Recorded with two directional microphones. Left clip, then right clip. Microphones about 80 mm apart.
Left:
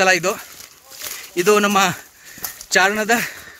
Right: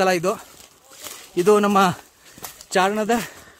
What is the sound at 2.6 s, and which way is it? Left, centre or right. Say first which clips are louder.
Speech: left 4 dB; right.